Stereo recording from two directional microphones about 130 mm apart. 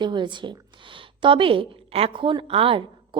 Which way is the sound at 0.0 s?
35° right (ahead or behind).